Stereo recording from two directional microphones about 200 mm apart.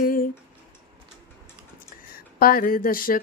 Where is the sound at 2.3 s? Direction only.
45° left (ahead or behind).